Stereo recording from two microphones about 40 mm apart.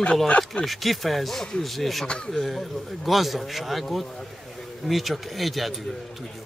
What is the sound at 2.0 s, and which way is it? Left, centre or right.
Speech, left.